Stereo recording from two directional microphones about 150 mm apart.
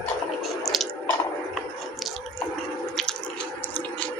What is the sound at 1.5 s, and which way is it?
Chewing, centre (ahead or behind).